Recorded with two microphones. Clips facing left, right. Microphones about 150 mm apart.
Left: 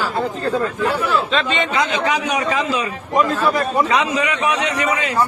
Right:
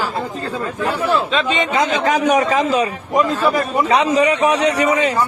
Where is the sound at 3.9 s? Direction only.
35° right (ahead or behind).